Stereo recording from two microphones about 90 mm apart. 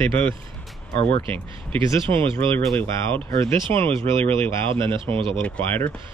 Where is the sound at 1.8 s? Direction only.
70° right (ahead or behind).